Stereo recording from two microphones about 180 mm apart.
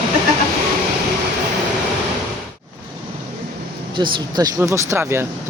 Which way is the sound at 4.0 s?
20° right (ahead or behind).